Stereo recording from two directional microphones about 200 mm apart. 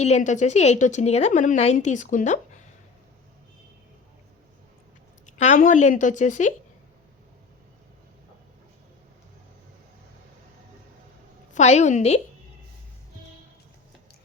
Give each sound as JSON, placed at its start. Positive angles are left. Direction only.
{"t": 0.0, "sound": "a woman's voice", "side_deg": 35}
{"t": 5.2, "sound": "a woman's voice", "side_deg": 40}
{"t": 11.5, "sound": "a woman's voice", "side_deg": 35}